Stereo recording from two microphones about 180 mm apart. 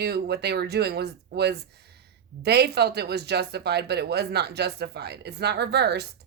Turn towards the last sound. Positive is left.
turn(degrees=-65)  # may be behind; listen again after turning